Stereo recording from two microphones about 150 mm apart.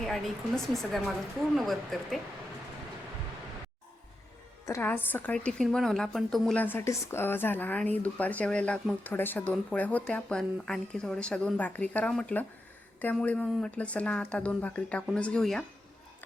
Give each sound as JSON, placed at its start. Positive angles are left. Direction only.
{"t": 0.0, "sound": "a woman's voice", "side_deg": 5}
{"t": 4.6, "sound": "a woman's voice", "side_deg": 15}